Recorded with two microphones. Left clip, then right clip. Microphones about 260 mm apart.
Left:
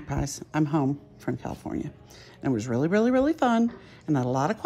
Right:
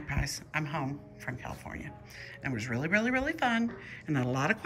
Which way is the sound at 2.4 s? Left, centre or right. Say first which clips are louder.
Left 8 dB; centre.